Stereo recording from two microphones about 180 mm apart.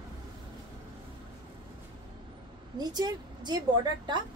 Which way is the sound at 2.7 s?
20° right (ahead or behind).